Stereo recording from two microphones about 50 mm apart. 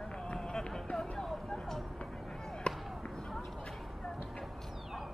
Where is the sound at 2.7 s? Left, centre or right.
Centre.